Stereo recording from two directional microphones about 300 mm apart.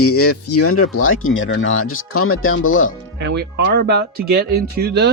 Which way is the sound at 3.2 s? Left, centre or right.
Right.